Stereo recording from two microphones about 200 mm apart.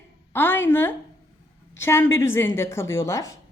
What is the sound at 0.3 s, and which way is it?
Speech, 10° left (ahead or behind).